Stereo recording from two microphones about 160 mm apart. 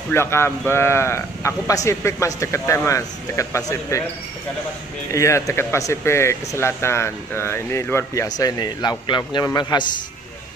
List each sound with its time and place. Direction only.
0.1 s speech: 15° left (ahead or behind)
5.1 s speech: 20° left (ahead or behind)